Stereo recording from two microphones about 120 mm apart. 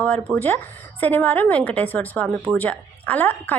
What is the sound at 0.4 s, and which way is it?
A woman's voice, 15° left (ahead or behind).